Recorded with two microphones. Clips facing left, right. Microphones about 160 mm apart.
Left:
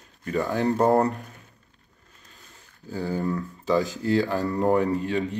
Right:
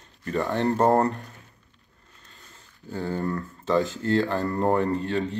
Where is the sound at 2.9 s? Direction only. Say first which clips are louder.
Left 1 dB; centre (ahead or behind).